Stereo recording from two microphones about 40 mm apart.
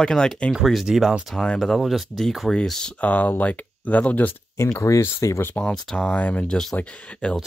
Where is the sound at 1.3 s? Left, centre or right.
Left.